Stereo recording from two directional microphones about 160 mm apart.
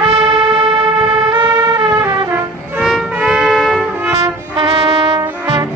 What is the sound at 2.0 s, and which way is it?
Music, 15° right (ahead or behind).